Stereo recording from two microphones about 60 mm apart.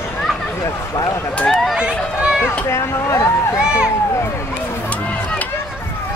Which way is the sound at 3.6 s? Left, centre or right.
Centre.